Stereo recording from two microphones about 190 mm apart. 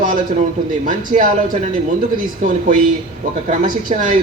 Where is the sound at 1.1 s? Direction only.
40° right (ahead or behind).